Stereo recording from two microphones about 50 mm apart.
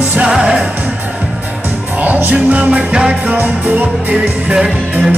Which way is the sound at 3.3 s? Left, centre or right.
Right.